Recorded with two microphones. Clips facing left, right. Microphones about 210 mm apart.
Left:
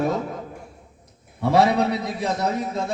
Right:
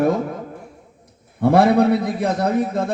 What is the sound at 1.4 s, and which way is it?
A man's voice, 55° right (ahead or behind).